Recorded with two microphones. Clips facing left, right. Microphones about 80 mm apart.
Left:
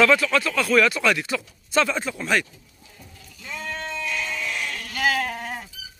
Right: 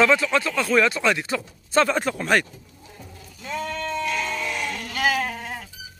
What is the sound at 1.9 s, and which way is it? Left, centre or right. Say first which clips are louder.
Speech: right 3 dB; right.